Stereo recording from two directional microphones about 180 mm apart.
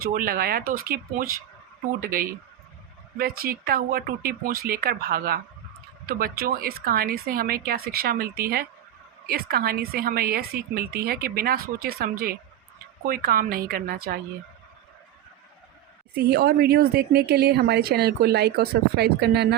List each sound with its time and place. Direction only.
0.0 s speech: 50° right (ahead or behind)
16.1 s speech: 65° right (ahead or behind)